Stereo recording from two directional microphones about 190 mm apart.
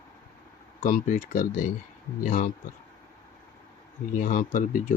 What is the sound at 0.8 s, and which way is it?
Speech, 45° left (ahead or behind).